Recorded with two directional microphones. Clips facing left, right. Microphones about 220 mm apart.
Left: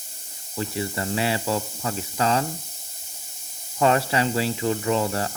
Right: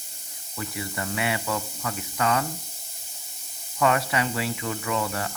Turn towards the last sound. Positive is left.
turn(degrees=30)  # may be behind; listen again after turning